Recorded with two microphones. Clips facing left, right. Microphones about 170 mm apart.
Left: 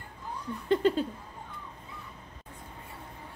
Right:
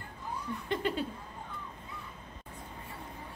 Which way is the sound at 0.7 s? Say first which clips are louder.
Left 8 dB; 45° left (ahead or behind).